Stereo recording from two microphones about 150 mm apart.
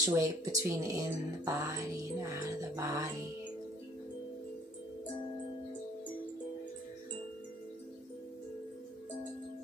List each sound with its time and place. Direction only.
0.1 s speech: 20° right (ahead or behind)